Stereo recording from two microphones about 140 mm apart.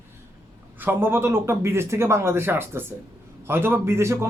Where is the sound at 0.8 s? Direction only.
15° right (ahead or behind).